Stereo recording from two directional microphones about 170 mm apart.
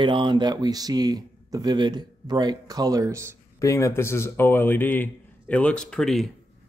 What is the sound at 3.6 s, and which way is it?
Speech, 20° left (ahead or behind).